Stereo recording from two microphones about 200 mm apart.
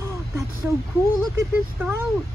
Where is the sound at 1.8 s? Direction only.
10° right (ahead or behind).